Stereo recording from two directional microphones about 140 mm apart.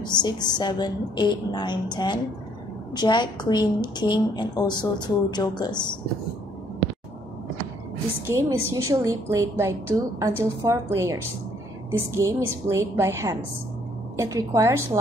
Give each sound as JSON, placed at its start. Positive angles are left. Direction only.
{"t": 0.0, "sound": "a woman's voice", "side_deg": 30}
{"t": 8.3, "sound": "a woman's voice", "side_deg": -20}